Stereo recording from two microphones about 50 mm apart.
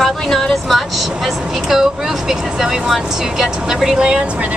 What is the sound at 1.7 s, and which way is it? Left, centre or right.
Speech, centre.